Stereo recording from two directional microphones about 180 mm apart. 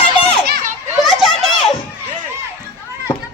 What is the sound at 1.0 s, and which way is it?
Children playing, centre (ahead or behind).